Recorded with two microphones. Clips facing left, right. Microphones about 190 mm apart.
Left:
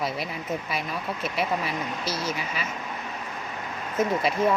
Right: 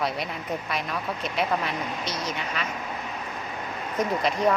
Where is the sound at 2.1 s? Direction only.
30° left (ahead or behind).